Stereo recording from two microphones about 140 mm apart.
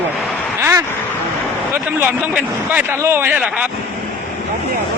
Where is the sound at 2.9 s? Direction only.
20° right (ahead or behind).